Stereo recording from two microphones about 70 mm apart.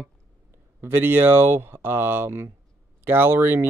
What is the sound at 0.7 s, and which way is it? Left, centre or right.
Speech, right.